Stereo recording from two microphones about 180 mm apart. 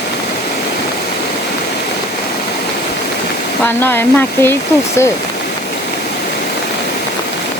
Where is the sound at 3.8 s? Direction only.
10° left (ahead or behind).